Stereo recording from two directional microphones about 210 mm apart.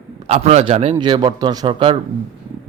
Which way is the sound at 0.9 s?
20° right (ahead or behind).